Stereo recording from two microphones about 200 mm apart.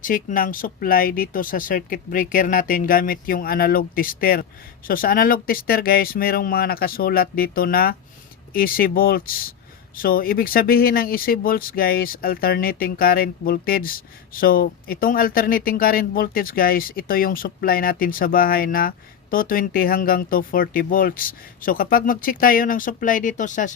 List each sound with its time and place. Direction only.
0.0 s speech: 40° left (ahead or behind)